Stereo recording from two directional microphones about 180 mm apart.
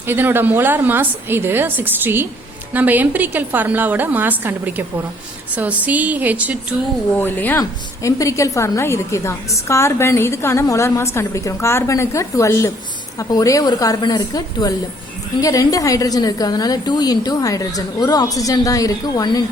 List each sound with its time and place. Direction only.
0.0 s a woman's voice: 10° right (ahead or behind)
7.2 s a woman's voice: 10° left (ahead or behind)